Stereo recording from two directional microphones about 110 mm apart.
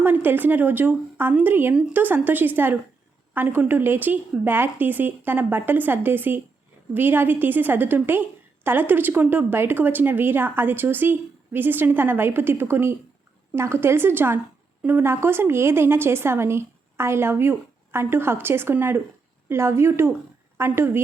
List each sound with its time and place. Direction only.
0.0 s a woman's voice: 15° right (ahead or behind)